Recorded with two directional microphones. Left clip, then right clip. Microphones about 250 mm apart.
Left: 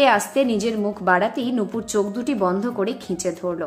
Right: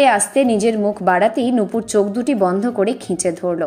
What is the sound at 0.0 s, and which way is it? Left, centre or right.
A woman's voice, centre.